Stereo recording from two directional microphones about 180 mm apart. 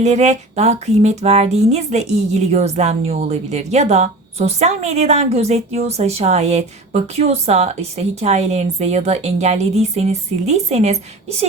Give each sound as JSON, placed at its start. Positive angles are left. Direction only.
{"t": 0.0, "sound": "music", "side_deg": -40}